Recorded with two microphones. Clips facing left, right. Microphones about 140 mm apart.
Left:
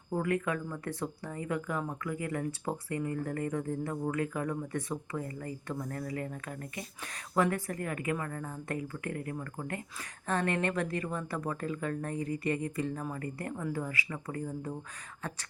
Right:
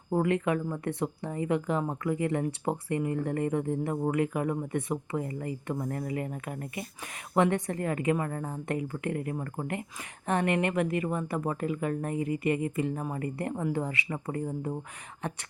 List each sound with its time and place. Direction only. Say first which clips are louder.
0.1 s a woman's voice: right 5 dB; 25° right (ahead or behind)